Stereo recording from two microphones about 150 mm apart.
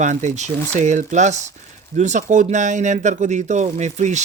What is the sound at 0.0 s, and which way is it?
Speech, 55° right (ahead or behind).